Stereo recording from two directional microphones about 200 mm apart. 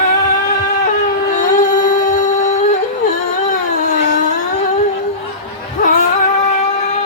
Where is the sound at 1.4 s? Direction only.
40° left (ahead or behind).